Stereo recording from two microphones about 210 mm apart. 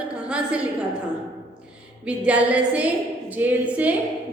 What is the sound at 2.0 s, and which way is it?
Speech, 5° right (ahead or behind).